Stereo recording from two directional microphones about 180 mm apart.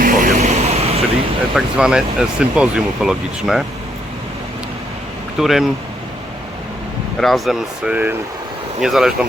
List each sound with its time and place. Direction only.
0.0 s a sound: 45° right (ahead or behind)
1.5 s speech: 5° right (ahead or behind)
5.4 s speech: centre (ahead or behind)
7.2 s speech: centre (ahead or behind)